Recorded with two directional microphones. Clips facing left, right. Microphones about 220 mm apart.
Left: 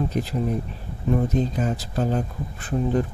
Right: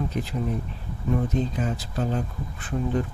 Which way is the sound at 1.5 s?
40° left (ahead or behind).